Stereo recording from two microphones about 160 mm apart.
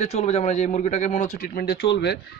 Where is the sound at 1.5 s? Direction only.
80° left.